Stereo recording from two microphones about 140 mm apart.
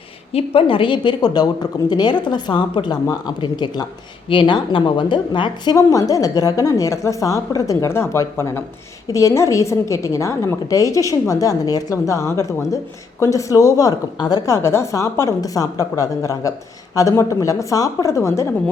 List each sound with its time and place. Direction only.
0.3 s a woman's voice: 40° left (ahead or behind)
5.7 s a woman's voice: 25° left (ahead or behind)